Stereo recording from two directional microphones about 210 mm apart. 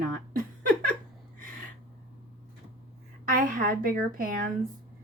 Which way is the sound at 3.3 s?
40° right (ahead or behind).